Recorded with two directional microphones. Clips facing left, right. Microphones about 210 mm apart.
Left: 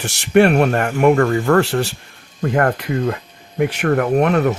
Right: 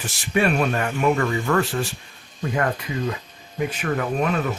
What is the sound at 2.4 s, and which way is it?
Speech, 55° left (ahead or behind).